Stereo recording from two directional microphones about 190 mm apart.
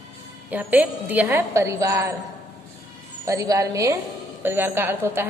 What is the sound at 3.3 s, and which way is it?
A woman's voice, 15° right (ahead or behind).